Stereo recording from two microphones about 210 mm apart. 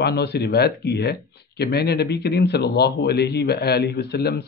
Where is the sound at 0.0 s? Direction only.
50° left (ahead or behind).